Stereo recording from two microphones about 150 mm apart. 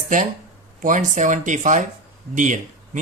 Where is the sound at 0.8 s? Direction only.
60° right (ahead or behind).